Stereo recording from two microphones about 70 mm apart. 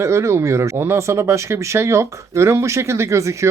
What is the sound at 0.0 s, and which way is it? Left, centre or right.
Speech, right.